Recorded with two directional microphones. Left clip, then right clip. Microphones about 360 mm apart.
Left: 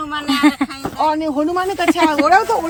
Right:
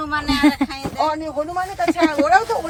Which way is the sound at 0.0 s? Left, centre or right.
Centre.